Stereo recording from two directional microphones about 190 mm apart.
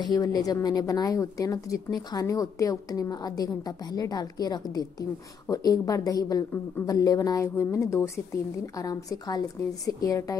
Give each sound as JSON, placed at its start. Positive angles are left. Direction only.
{"t": 0.0, "sound": "a woman's voice", "side_deg": 20}